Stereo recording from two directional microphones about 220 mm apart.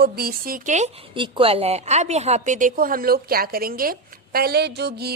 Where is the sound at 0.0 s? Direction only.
45° right (ahead or behind).